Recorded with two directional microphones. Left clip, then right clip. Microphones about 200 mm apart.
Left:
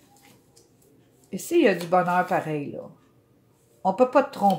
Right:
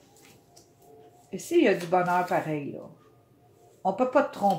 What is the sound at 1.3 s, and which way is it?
Speech, 40° left (ahead or behind).